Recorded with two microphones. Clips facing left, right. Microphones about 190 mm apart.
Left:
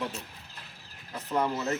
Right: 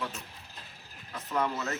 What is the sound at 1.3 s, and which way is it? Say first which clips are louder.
Speech: left 3 dB; 25° left (ahead or behind).